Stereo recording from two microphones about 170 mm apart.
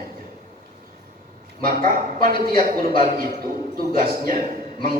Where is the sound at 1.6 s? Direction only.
60° right (ahead or behind).